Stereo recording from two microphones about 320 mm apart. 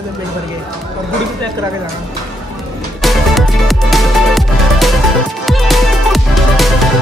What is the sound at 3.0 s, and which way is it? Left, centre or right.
Music, centre.